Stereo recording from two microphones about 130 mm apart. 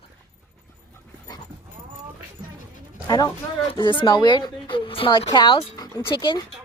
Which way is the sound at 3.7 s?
40° left (ahead or behind).